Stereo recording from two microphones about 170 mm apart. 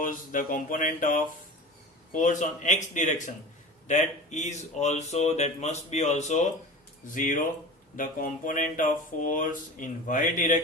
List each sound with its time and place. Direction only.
0.0 s speech: 50° left (ahead or behind)